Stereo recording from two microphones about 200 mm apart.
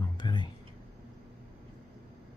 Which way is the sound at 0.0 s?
20° left (ahead or behind).